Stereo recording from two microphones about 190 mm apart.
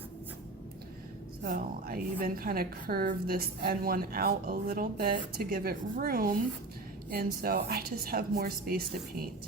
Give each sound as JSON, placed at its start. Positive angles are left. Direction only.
{"t": 1.5, "sound": "a woman's voice", "side_deg": -45}